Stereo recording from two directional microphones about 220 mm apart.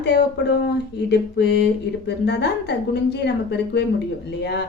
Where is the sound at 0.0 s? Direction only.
50° left (ahead or behind).